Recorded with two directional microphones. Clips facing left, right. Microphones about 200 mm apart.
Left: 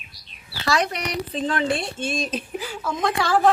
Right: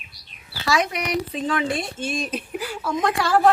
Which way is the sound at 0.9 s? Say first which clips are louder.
Right 2 dB; 10° right (ahead or behind).